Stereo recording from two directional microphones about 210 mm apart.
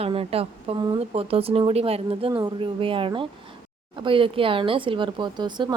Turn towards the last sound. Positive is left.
turn(degrees=-20)  # may be behind; listen again after turning